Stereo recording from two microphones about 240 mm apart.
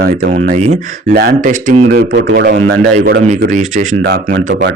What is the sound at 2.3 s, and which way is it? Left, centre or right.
A man's voice, right.